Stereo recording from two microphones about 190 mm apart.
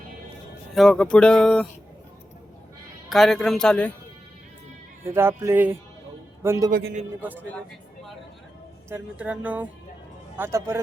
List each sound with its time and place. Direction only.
0.7 s music: centre (ahead or behind)
3.1 s music: centre (ahead or behind)
5.1 s a man's voice: 15° right (ahead or behind)
6.7 s a man's voice: 55° right (ahead or behind)
7.2 s speech: 10° right (ahead or behind)
8.9 s speech: 5° right (ahead or behind)